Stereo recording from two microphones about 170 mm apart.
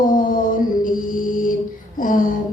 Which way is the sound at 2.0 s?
55° left (ahead or behind).